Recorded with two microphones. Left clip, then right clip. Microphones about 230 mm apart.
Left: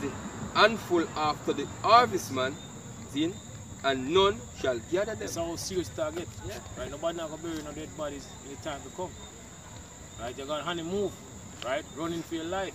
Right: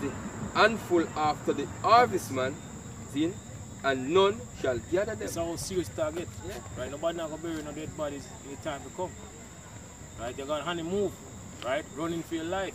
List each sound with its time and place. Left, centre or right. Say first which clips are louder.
0.0 s a sound: even; left
0.5 s speech: left 1 dB; centre
5.3 s speech: even; centre
10.2 s speech: right 1 dB; centre